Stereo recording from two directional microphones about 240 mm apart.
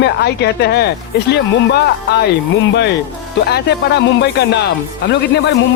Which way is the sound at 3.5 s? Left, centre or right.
Left.